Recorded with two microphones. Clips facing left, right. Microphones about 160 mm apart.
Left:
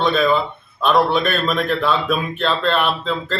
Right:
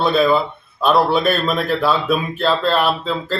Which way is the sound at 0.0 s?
5° right (ahead or behind).